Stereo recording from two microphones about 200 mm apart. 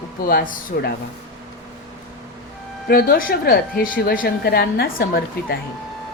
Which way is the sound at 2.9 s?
45° left (ahead or behind).